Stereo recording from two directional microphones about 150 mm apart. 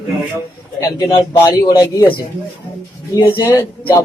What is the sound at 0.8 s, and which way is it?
Speech, 30° left (ahead or behind).